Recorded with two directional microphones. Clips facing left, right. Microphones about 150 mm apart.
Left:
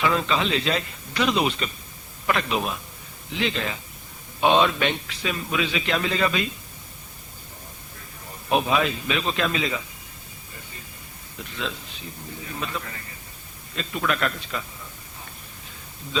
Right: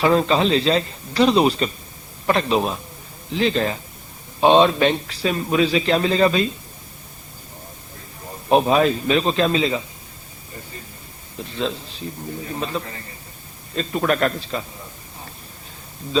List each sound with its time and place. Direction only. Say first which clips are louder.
0.0 s a man's voice: right 6 dB; 35° right (ahead or behind)
8.4 s a man's voice: right 6 dB; 35° right (ahead or behind)
11.3 s a man's voice: right 7 dB; 30° right (ahead or behind)